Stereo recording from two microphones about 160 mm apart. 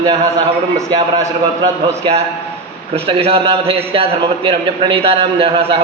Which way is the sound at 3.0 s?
35° right (ahead or behind).